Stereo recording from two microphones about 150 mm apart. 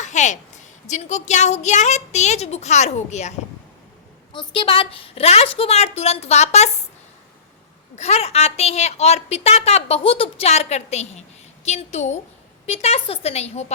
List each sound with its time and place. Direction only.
0.0 s a woman's voice: 55° left (ahead or behind)
4.3 s a woman's voice: 35° left (ahead or behind)
7.9 s a woman's voice: 45° left (ahead or behind)